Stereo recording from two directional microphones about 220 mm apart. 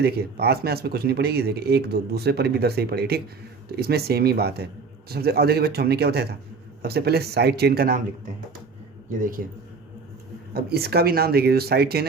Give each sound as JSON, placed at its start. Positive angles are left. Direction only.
{"t": 0.0, "sound": "speech", "side_deg": -45}
{"t": 10.5, "sound": "speech", "side_deg": -45}